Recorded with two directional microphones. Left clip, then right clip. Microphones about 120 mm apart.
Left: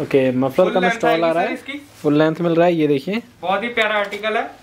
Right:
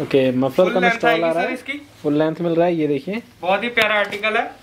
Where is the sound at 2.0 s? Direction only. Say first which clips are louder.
Left 3 dB; 45° left (ahead or behind).